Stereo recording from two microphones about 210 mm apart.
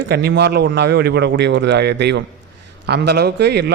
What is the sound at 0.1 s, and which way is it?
A man's voice, 50° right (ahead or behind).